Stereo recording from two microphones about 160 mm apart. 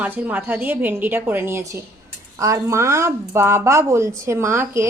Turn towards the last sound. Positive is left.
turn(degrees=-15)  # may be behind; listen again after turning